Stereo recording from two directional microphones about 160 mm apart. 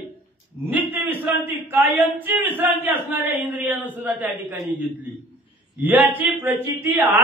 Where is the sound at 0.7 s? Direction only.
10° right (ahead or behind).